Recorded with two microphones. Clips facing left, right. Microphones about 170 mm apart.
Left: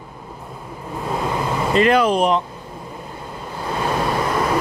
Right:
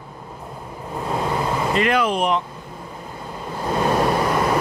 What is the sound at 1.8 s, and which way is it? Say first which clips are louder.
Speech: left 6 dB; 35° left (ahead or behind).